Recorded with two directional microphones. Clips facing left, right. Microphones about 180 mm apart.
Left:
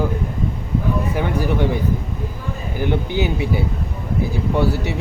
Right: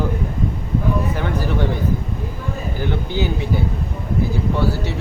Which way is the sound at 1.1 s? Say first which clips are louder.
Left 2 dB; 15° left (ahead or behind).